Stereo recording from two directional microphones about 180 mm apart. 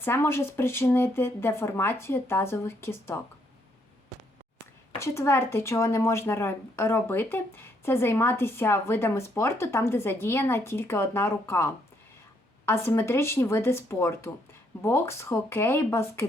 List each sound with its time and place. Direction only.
0.0 s speech: 10° left (ahead or behind)
4.9 s speech: 15° left (ahead or behind)